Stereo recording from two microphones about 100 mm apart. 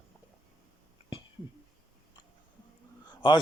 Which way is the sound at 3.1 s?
55° left (ahead or behind).